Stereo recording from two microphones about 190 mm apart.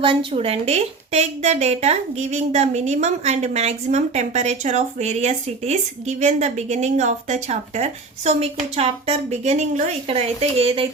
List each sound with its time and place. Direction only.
0.0 s a woman's voice: 25° right (ahead or behind)